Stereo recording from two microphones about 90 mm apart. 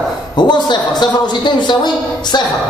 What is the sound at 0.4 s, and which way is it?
A man's voice, 55° left (ahead or behind).